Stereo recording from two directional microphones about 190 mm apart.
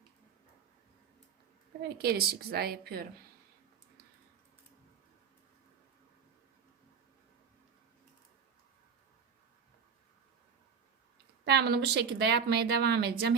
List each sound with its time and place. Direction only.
2.0 s speech: 55° right (ahead or behind)
11.4 s a woman's voice: 60° right (ahead or behind)